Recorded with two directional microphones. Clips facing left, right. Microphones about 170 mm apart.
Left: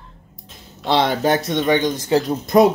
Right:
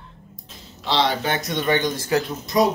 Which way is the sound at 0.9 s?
50° left (ahead or behind).